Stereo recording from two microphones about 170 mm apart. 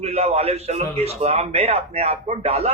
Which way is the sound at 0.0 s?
35° right (ahead or behind).